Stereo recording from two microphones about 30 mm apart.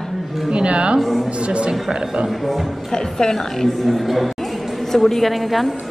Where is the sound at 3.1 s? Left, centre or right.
Left.